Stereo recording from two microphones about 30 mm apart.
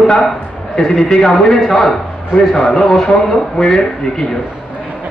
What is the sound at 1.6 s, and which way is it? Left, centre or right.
A man's voice, centre.